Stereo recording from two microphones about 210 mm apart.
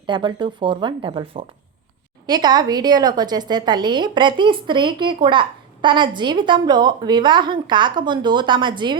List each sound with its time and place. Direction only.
0.0 s a woman's voice: 20° right (ahead or behind)